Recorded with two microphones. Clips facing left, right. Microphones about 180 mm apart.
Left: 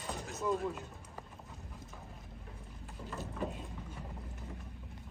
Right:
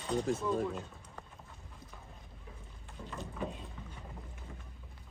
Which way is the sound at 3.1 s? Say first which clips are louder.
Left 1 dB; 5° left (ahead or behind).